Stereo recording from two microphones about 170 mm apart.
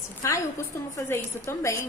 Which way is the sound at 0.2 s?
15° left (ahead or behind).